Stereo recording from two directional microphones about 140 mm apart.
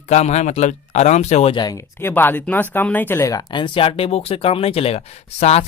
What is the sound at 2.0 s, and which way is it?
Speech, 15° left (ahead or behind).